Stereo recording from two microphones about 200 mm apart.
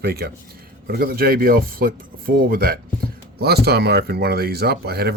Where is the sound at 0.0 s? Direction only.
50° right (ahead or behind).